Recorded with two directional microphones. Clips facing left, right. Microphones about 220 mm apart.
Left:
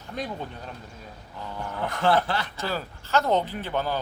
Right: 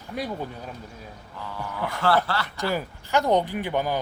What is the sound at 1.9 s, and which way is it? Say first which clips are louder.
Speech: even; 20° left (ahead or behind).